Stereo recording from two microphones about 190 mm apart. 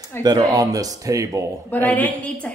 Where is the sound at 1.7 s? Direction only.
10° left (ahead or behind).